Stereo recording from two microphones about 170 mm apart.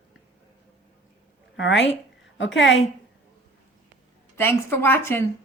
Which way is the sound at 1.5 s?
90° left.